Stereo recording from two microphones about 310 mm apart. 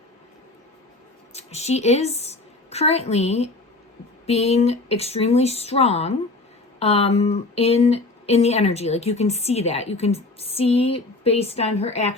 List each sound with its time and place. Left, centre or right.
1.3 s a woman's voice: left